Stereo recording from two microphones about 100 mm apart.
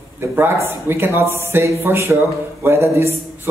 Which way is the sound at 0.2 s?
25° right (ahead or behind).